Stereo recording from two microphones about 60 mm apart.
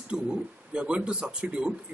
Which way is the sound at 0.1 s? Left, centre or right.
Centre.